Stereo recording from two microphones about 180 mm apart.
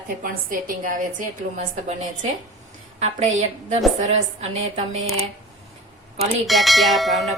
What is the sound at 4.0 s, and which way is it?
A woman's voice, 40° right (ahead or behind).